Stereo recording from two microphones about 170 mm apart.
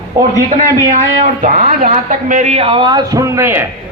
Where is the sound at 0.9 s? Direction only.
45° right (ahead or behind); by 3.6 s 15° right (ahead or behind).